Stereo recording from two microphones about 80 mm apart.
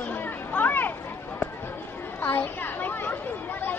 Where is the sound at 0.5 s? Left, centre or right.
Left.